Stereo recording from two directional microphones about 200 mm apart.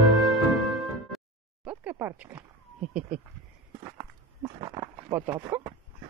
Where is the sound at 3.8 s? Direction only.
15° right (ahead or behind).